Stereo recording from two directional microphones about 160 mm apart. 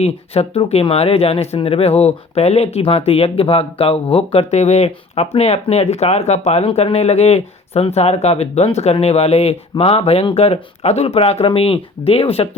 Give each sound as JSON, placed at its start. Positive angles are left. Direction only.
{"t": 0.0, "sound": "speech", "side_deg": 40}